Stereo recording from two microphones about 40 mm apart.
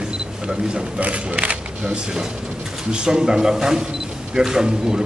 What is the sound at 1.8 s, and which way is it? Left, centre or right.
A man's voice, centre.